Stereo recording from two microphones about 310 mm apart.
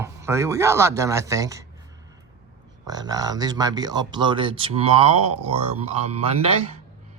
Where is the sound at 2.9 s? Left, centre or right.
Centre.